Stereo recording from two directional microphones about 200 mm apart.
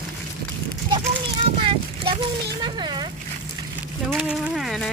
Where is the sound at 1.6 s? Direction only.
25° right (ahead or behind).